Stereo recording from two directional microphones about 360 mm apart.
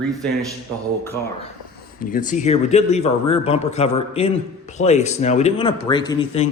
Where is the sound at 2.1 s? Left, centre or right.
Left.